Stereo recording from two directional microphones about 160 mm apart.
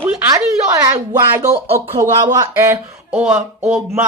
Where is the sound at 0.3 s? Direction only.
25° right (ahead or behind).